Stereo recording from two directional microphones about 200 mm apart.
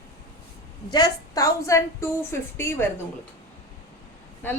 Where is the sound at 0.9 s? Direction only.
20° left (ahead or behind).